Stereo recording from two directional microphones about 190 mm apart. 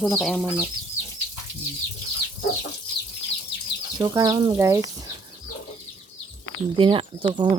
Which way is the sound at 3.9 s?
20° right (ahead or behind).